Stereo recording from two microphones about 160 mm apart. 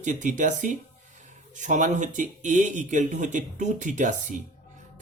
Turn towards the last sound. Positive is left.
turn(degrees=-50)  # may be behind; listen again after turning